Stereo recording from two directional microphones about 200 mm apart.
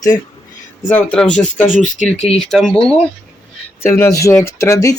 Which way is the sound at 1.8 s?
40° left (ahead or behind).